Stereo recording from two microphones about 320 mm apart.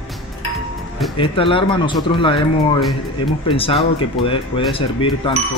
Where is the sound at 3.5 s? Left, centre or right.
Centre.